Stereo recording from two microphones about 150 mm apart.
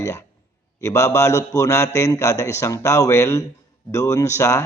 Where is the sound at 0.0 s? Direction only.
20° left (ahead or behind).